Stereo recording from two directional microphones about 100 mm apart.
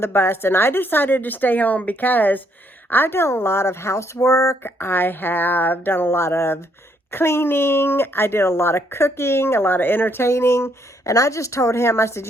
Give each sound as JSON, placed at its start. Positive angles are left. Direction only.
{"t": 0.0, "sound": "speech", "side_deg": 25}